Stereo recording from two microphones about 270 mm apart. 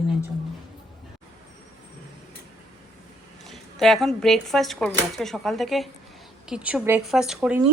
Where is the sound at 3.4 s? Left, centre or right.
Centre.